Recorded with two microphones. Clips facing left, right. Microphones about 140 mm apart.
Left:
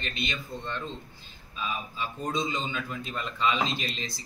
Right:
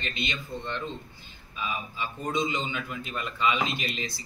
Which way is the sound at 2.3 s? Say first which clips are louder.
Right 2 dB; 15° right (ahead or behind).